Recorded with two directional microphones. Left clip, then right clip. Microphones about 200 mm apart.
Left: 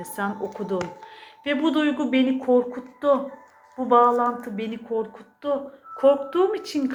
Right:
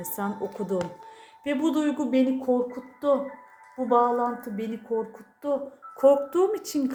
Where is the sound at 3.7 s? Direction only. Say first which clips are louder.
Left 4 dB; 15° right (ahead or behind).